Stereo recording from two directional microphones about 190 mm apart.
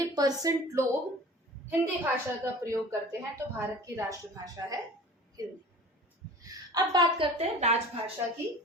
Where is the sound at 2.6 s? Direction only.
15° right (ahead or behind).